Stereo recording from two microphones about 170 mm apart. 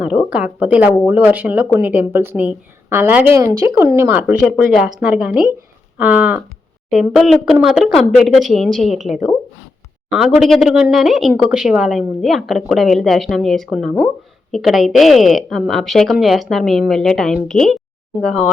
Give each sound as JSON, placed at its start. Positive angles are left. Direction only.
{"t": 0.3, "sound": "speech", "side_deg": -5}